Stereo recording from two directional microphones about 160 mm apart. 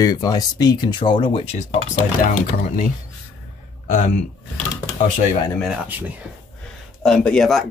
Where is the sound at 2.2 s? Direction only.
60° left (ahead or behind).